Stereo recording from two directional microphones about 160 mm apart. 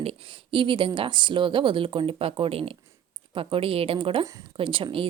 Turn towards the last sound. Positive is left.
turn(degrees=-35)  # may be behind; listen again after turning